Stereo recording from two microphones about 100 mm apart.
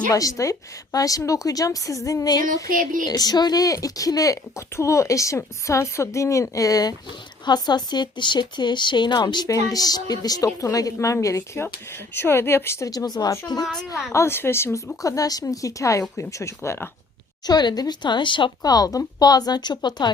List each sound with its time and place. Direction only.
0.1 s speech: 35° left (ahead or behind)
13.1 s speech: 40° left (ahead or behind)
14.1 s speech: 25° left (ahead or behind)
15.0 s speech: 35° left (ahead or behind)
17.4 s speech: 45° left (ahead or behind)